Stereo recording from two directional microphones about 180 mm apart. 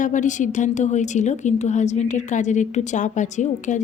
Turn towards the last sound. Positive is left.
turn(degrees=40)  # may be behind; listen again after turning